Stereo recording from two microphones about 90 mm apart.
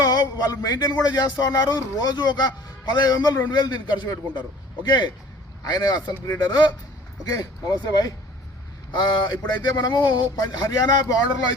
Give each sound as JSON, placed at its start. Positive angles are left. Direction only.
{"t": 0.0, "sound": "a man's voice", "side_deg": 50}